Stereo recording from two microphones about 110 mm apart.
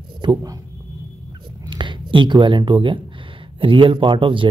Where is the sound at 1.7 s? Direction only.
45° right (ahead or behind).